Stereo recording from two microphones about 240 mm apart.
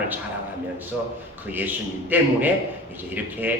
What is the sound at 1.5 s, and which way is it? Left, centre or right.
A man's voice, centre.